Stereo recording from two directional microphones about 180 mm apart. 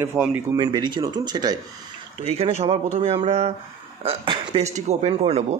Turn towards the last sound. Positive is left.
turn(degrees=-35)  # may be behind; listen again after turning